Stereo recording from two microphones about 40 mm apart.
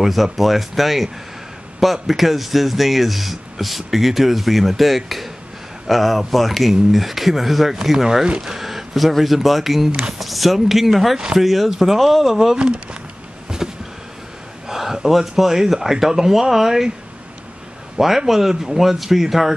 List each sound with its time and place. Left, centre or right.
0.0 s speech: centre
12.1 s speech: centre
12.5 s speech: right
13.5 s a sound: centre
14.7 s speech: centre
17.9 s speech: centre